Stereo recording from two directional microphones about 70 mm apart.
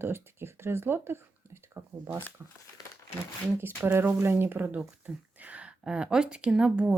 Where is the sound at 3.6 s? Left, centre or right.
Right.